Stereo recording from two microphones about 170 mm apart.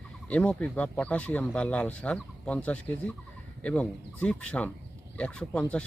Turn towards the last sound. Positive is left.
turn(degrees=5)  # may be behind; listen again after turning